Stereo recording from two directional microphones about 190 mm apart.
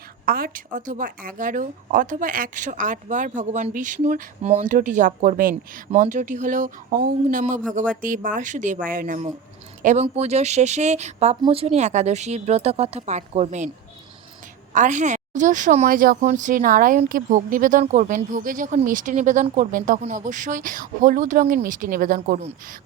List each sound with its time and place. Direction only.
0.3 s a woman's voice: 50° right (ahead or behind)
14.7 s a woman's voice: 40° right (ahead or behind)